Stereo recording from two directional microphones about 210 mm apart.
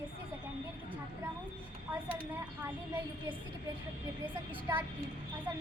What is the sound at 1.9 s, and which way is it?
Speech, 10° right (ahead or behind).